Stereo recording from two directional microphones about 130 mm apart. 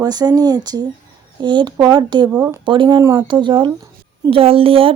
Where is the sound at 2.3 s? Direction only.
15° right (ahead or behind).